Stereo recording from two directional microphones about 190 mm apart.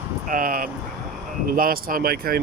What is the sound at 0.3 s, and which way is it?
Speech, 45° right (ahead or behind).